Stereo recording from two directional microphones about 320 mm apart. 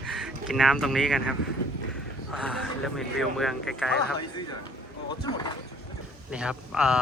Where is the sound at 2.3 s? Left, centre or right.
Centre.